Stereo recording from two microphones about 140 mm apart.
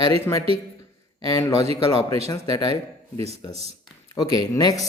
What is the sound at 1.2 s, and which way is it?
Speech, 25° left (ahead or behind).